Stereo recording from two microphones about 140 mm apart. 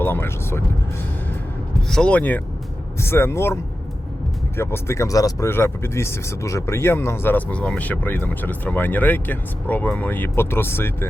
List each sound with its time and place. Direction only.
0.0 s speech: 15° left (ahead or behind)
1.9 s speech: 5° left (ahead or behind)